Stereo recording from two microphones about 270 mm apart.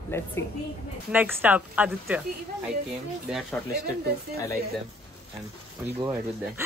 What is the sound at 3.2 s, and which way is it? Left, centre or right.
Speech, centre.